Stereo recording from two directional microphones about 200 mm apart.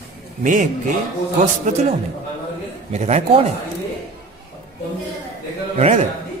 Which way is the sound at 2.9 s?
35° right (ahead or behind).